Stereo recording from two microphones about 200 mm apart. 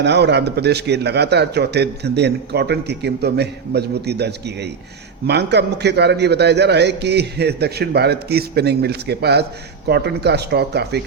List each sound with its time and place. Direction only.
0.0 s a man's voice: 60° right (ahead or behind)